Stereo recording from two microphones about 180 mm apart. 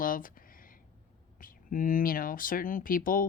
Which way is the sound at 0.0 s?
50° left (ahead or behind).